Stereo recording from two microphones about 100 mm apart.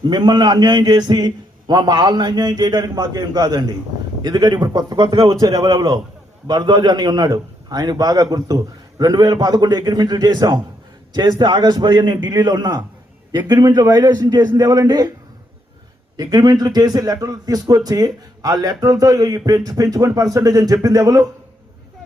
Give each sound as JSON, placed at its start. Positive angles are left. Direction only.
{"t": 0.1, "sound": "a man's voice", "side_deg": -50}
{"t": 16.1, "sound": "a man's voice", "side_deg": -40}